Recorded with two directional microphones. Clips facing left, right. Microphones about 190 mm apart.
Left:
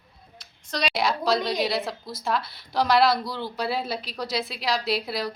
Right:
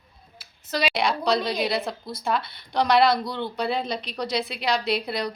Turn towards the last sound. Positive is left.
turn(degrees=0)  # may be behind; listen again after turning